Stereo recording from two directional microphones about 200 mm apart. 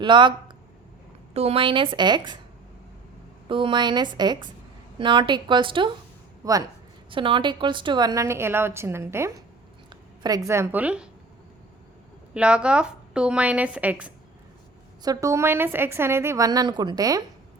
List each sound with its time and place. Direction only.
0.0 s speech: 25° right (ahead or behind)
3.5 s a woman's voice: 25° right (ahead or behind); by 11.1 s 5° right (ahead or behind)
12.3 s a woman's voice: 5° right (ahead or behind)